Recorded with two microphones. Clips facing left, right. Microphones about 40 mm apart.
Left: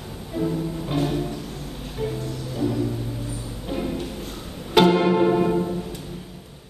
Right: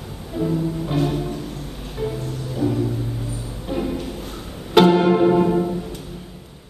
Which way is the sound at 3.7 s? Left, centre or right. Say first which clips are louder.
Right 3 dB; centre.